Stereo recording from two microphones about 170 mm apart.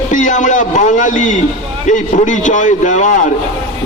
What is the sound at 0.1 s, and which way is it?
A man's voice, 50° left (ahead or behind).